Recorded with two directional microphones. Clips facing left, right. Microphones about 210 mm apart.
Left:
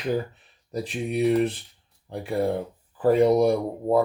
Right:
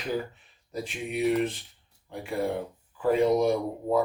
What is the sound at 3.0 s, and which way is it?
Speech, 35° left (ahead or behind).